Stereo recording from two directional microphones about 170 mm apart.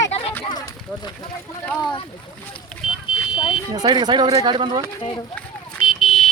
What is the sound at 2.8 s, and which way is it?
Smoke detector, 5° right (ahead or behind).